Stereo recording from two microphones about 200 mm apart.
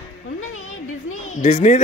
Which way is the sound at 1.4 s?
35° left (ahead or behind).